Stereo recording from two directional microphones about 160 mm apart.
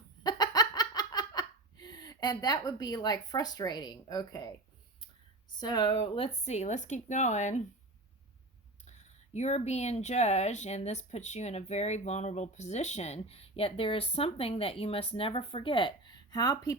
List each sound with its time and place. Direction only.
0.2 s laughter: 25° left (ahead or behind)
5.5 s speech: 25° left (ahead or behind); by 7.6 s 45° left (ahead or behind)
8.9 s speech: 45° left (ahead or behind); by 16.7 s 25° left (ahead or behind)